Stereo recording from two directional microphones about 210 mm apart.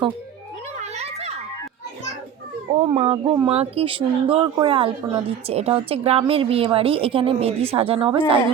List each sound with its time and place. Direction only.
0.8 s children playing: 30° right (ahead or behind)
2.8 s speech: 30° right (ahead or behind)